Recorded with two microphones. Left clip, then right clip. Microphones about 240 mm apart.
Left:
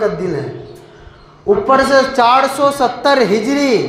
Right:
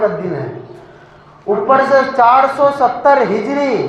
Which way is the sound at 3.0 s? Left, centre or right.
Left.